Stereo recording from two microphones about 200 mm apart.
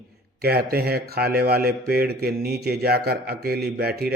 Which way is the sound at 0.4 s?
50° right (ahead or behind).